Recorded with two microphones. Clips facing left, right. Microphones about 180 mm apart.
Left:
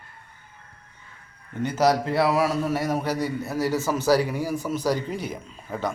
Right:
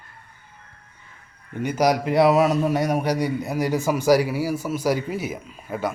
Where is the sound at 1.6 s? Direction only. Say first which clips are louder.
Right 1 dB; 10° right (ahead or behind).